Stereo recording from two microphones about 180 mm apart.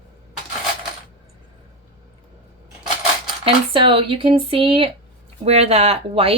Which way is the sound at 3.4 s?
30° right (ahead or behind).